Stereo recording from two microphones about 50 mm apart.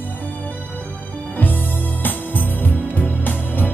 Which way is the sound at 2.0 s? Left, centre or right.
Left.